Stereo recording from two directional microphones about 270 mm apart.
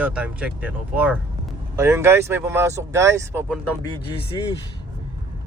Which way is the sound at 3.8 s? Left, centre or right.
Centre.